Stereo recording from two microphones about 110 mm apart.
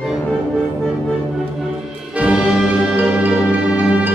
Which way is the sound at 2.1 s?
10° right (ahead or behind).